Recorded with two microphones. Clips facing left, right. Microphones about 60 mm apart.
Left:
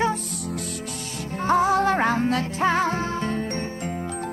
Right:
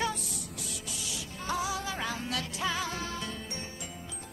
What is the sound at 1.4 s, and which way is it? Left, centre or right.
Music, left.